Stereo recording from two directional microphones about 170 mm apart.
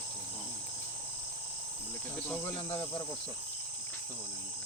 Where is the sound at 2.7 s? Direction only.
30° left (ahead or behind).